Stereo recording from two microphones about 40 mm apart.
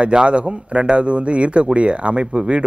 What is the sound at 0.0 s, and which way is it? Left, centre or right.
A man's voice, right.